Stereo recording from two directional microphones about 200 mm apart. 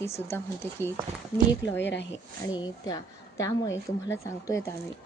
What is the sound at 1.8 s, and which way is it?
Speech, 60° left (ahead or behind).